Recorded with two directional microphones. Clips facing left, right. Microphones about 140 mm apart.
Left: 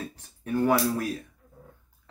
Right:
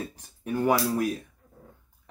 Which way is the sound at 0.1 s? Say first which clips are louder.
Left 1 dB; 15° right (ahead or behind).